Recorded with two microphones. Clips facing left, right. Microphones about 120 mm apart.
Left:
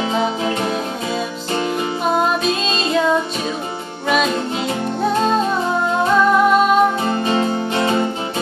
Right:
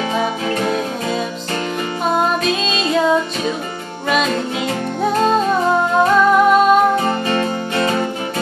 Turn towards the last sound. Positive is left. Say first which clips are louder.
# even
turn(degrees=20)  # may be behind; listen again after turning